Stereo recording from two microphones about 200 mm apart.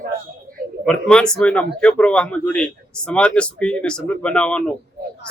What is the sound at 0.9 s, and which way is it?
Speech, 5° left (ahead or behind).